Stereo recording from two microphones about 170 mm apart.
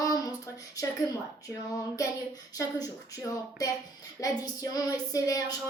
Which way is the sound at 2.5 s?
20° left (ahead or behind).